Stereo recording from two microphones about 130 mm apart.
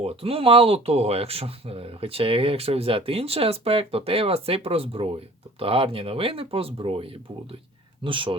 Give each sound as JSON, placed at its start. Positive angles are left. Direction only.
{"t": 0.0, "sound": "speech", "side_deg": -50}